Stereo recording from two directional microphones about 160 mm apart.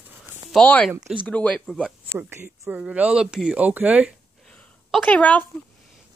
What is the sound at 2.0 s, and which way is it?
Speech, 15° right (ahead or behind).